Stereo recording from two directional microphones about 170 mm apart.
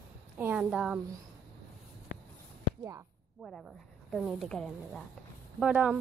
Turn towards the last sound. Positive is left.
turn(degrees=-10)  # may be behind; listen again after turning